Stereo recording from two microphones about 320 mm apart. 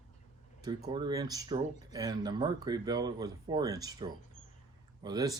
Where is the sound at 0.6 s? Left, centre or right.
Centre.